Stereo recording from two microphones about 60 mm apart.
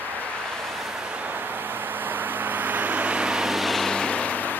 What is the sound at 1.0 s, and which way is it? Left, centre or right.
Vehicle, right.